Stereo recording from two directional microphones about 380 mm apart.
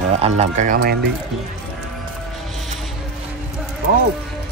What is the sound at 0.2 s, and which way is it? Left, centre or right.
Speech, centre.